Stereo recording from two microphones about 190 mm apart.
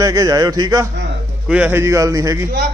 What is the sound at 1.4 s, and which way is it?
Speech, 5° right (ahead or behind).